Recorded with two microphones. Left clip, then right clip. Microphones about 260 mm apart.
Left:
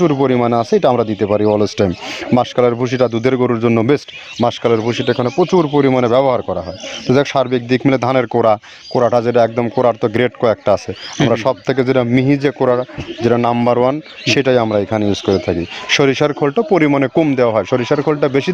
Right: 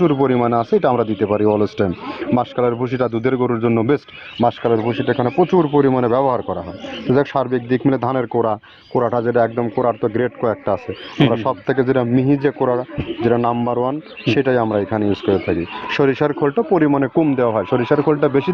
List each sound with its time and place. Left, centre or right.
0.0 s speech: left